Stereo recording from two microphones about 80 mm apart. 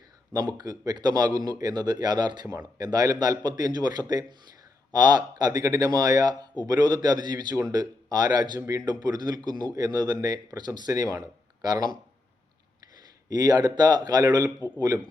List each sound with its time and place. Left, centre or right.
0.3 s a man's voice: right
13.3 s a man's voice: right